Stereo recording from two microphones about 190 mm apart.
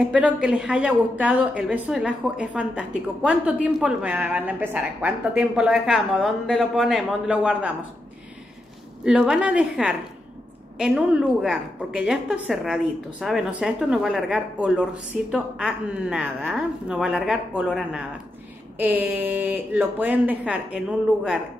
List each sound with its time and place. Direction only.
0.0 s a woman's voice: 5° right (ahead or behind)
9.0 s a woman's voice: 5° right (ahead or behind)